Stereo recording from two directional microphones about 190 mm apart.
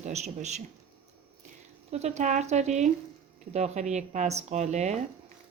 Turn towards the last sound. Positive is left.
turn(degrees=-35)  # may be behind; listen again after turning